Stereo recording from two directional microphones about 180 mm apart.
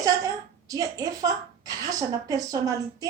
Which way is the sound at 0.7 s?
20° right (ahead or behind).